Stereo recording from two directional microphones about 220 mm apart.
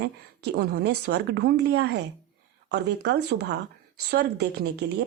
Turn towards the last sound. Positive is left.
turn(degrees=-45)  # may be behind; listen again after turning